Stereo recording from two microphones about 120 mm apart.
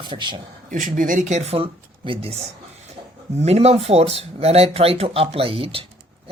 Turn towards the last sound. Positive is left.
turn(degrees=-50)  # may be behind; listen again after turning